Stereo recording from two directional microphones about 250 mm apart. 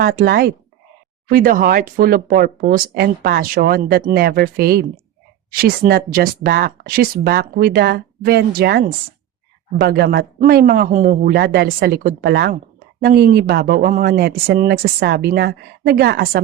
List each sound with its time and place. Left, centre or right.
0.0 s speech: right